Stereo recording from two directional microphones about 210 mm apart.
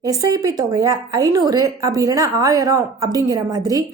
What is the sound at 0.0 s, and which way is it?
Speech, 20° right (ahead or behind).